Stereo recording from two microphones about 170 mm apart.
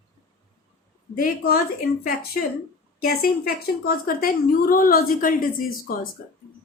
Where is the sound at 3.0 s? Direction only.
60° left (ahead or behind).